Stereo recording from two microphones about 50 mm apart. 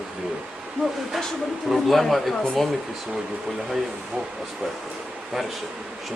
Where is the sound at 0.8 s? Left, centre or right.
Left.